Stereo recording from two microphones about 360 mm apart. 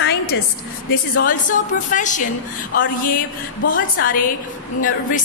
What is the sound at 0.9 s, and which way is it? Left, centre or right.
Speech, left.